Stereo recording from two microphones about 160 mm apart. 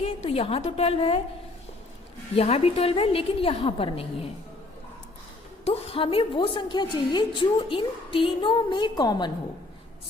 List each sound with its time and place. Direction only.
0.0 s a woman's voice: 40° left (ahead or behind)
2.3 s a woman's voice: 40° left (ahead or behind)
5.6 s a woman's voice: 40° left (ahead or behind)